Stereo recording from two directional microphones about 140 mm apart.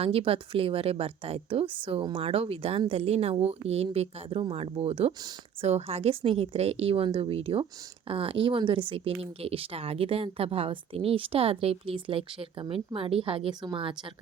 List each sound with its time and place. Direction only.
0.0 s a woman's voice: 45° right (ahead or behind)